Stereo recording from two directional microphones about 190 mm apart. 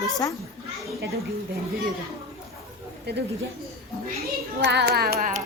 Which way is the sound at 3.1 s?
60° right (ahead or behind).